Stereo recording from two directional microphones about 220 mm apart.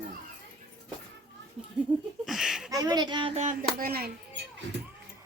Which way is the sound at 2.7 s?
15° right (ahead or behind).